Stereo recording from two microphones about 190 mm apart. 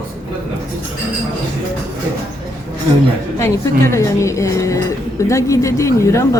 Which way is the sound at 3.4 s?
15° left (ahead or behind).